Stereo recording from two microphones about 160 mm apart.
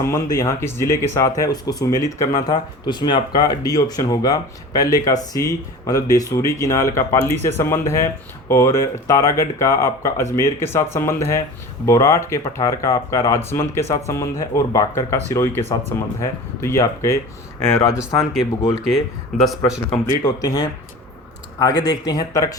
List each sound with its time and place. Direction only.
0.0 s speech: 20° left (ahead or behind)
18.4 s speech: 25° left (ahead or behind)
18.9 s speech: centre (ahead or behind)
20.1 s speech: 25° left (ahead or behind)
21.8 s speech: 30° left (ahead or behind)